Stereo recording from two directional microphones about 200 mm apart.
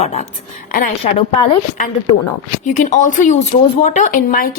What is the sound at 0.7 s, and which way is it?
Speech, 45° left (ahead or behind).